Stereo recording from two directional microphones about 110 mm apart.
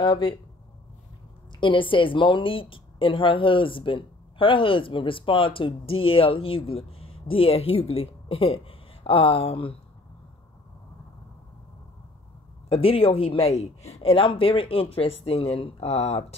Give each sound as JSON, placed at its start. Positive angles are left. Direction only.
{"t": 0.0, "sound": "a woman's voice", "side_deg": 45}
{"t": 1.5, "sound": "a woman's voice", "side_deg": 50}
{"t": 12.6, "sound": "speech", "side_deg": 60}